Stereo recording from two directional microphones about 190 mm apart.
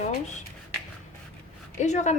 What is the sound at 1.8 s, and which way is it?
Speech, 40° left (ahead or behind).